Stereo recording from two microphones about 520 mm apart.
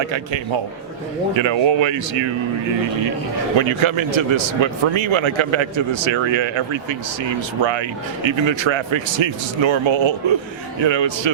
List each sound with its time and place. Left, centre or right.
1.4 s a man's voice: right
3.6 s a man's voice: right